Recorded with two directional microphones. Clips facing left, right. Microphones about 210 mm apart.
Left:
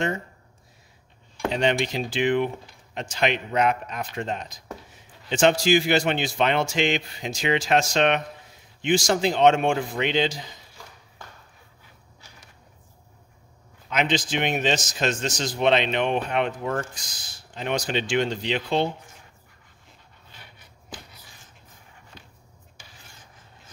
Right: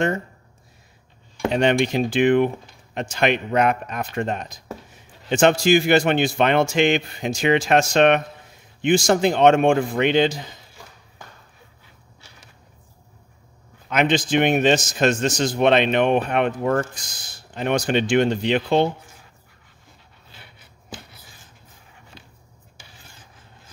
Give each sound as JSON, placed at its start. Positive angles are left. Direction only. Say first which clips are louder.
{"t": 1.5, "sound": "a man's voice", "louder": "right 5 dB", "side_deg": -55}
{"t": 13.8, "sound": "a man's voice", "louder": "right 5 dB", "side_deg": -55}